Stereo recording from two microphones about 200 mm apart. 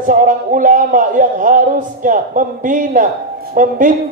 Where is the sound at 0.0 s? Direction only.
40° right (ahead or behind).